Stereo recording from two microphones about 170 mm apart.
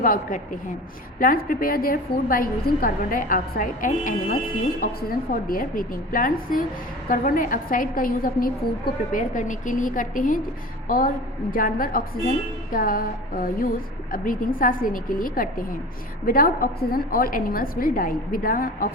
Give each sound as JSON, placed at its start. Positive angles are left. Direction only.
{"t": 0.0, "sound": "a woman's voice", "side_deg": 50}